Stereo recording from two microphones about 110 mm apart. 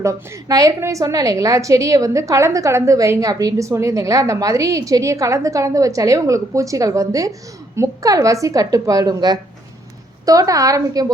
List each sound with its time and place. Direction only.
0.0 s a woman's voice: 30° right (ahead or behind)